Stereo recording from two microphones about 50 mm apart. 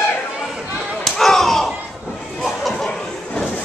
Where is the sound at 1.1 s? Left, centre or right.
Centre.